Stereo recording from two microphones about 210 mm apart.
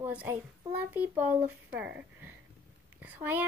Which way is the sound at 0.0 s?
10° right (ahead or behind).